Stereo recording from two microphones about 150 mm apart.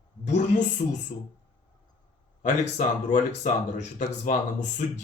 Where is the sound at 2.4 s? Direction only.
55° left (ahead or behind).